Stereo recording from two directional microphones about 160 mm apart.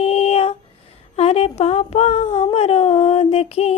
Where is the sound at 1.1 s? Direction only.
40° left (ahead or behind).